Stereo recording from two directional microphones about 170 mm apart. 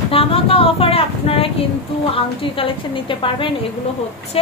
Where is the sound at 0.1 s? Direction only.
35° left (ahead or behind).